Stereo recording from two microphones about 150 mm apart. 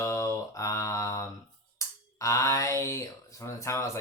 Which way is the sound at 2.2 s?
20° left (ahead or behind).